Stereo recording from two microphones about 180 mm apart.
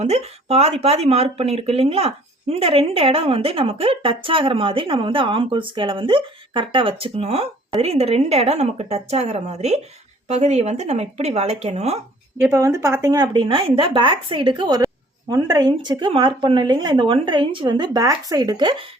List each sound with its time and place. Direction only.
0.0 s speech: 35° right (ahead or behind)
12.4 s speech: 15° right (ahead or behind)